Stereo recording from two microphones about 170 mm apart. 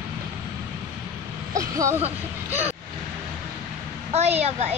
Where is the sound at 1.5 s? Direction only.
20° right (ahead or behind).